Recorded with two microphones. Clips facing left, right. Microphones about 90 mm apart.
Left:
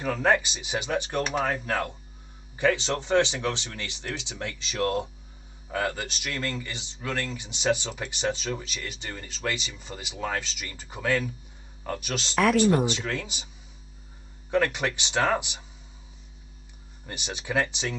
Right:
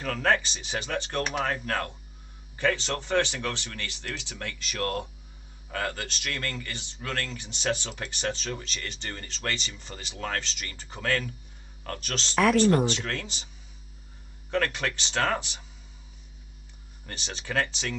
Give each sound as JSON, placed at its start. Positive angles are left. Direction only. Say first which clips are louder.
{"t": 0.0, "sound": "speech", "louder": "left 2 dB", "side_deg": 15}
{"t": 12.4, "sound": "speech", "louder": "even", "side_deg": 0}
{"t": 12.6, "sound": "speech", "louder": "even", "side_deg": 10}
{"t": 14.5, "sound": "speech", "louder": "left 3 dB", "side_deg": 15}
{"t": 17.0, "sound": "speech", "louder": "left 3 dB", "side_deg": 15}